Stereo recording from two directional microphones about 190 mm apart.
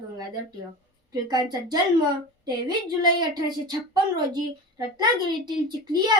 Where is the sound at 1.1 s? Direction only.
20° right (ahead or behind).